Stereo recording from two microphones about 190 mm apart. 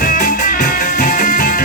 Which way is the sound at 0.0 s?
45° left (ahead or behind).